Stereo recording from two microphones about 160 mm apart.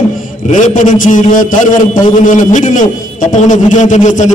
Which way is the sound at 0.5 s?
50° left (ahead or behind).